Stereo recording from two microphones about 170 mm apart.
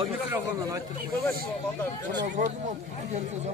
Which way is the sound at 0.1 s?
15° right (ahead or behind).